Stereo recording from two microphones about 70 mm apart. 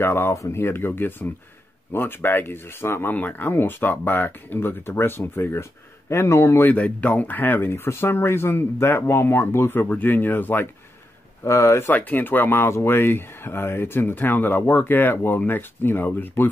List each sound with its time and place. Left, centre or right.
0.0 s speech: left
6.7 s speech: left
11.4 s speech: left
11.9 s speech: left